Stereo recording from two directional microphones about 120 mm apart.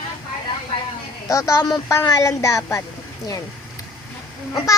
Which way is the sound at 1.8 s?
25° left (ahead or behind).